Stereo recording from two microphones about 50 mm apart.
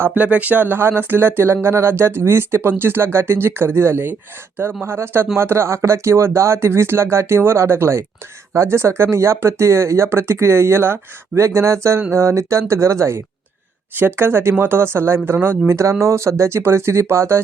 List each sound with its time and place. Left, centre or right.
0.1 s speech: right
13.9 s speech: right
15.8 s speech: right